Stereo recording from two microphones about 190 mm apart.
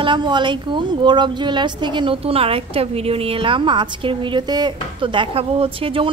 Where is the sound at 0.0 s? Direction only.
25° right (ahead or behind).